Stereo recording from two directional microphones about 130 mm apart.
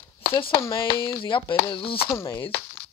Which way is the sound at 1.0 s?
40° left (ahead or behind).